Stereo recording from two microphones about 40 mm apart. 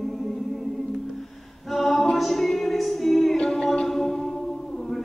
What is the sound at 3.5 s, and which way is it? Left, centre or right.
A capella, centre.